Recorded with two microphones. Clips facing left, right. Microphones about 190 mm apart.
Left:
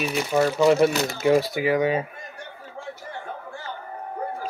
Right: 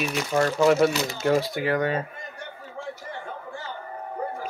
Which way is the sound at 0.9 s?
55° left (ahead or behind).